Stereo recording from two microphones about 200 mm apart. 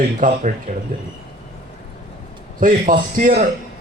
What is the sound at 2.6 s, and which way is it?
Speech, 40° right (ahead or behind).